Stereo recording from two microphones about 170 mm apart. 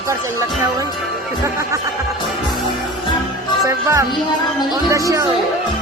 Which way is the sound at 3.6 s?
20° right (ahead or behind).